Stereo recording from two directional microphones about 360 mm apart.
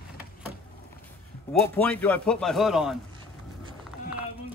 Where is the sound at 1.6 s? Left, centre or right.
Centre.